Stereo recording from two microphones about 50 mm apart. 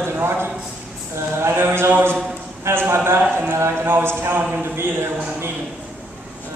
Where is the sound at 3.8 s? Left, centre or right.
Right.